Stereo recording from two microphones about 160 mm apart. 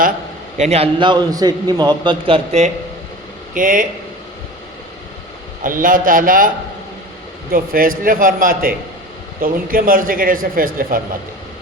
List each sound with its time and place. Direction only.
0.5 s a man's voice: 45° right (ahead or behind)
3.5 s a man's voice: 55° right (ahead or behind)
5.6 s a man's voice: 60° right (ahead or behind)
7.5 s a man's voice: 60° right (ahead or behind)